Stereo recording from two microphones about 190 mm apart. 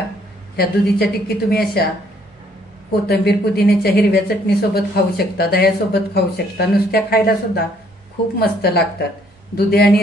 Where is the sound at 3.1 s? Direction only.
55° left (ahead or behind).